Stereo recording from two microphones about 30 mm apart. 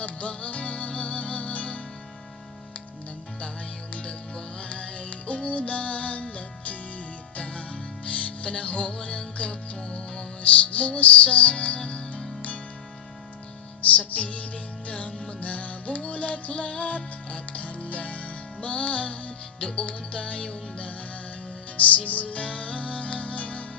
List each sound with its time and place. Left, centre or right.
0.0 s music: left
4.7 s music: left
9.5 s music: left
10.4 s music: left
13.9 s music: left
21.8 s music: left